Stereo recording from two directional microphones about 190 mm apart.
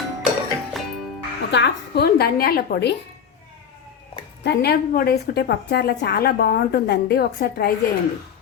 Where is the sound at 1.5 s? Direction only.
60° left (ahead or behind).